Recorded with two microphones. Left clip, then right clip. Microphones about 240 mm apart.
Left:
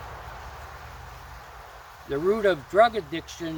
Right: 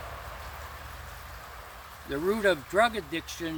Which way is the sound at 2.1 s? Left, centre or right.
Centre.